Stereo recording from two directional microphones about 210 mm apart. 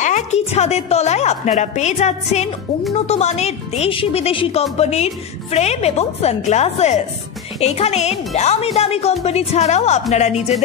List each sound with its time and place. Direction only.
0.0 s a woman's voice: 35° left (ahead or behind)